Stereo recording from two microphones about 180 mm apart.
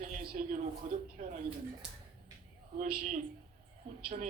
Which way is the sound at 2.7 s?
50° right (ahead or behind).